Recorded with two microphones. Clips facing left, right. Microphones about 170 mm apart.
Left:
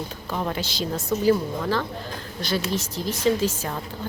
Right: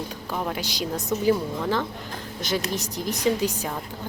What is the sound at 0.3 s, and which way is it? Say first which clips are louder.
A woman's voice: left 1 dB; 10° right (ahead or behind).